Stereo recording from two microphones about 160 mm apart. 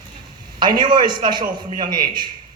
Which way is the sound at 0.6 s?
30° right (ahead or behind).